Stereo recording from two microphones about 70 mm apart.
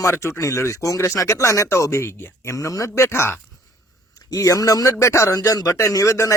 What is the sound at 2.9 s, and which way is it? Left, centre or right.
Speech, left.